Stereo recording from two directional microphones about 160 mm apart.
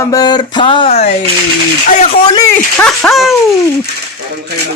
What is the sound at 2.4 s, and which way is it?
Speech, 15° left (ahead or behind).